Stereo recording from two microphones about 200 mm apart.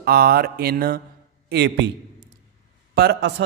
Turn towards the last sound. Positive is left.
turn(degrees=-55)  # may be behind; listen again after turning